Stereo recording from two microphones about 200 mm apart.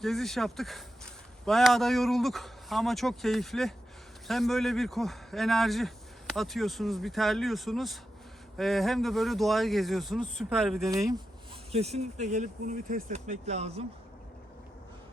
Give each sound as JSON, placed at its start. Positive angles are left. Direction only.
{"t": 0.0, "sound": "a man's voice", "side_deg": 0}
{"t": 11.7, "sound": "speech", "side_deg": -30}